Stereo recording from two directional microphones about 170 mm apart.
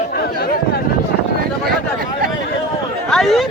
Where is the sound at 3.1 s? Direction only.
Centre (ahead or behind).